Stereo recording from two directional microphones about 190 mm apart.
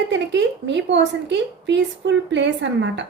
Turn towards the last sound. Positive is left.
turn(degrees=-70)  # may be behind; listen again after turning